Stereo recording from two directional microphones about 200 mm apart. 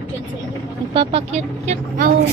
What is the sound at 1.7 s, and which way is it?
Speech, 45° right (ahead or behind).